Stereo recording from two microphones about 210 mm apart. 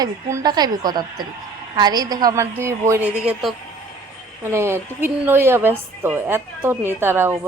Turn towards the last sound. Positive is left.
turn(degrees=-10)  # may be behind; listen again after turning